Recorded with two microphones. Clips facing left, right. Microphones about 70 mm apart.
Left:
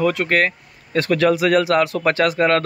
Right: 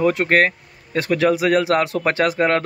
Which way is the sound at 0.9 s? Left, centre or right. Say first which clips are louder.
Left 1 dB; centre.